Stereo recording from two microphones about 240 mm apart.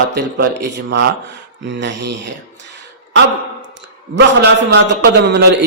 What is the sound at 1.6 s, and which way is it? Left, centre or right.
Speech, right.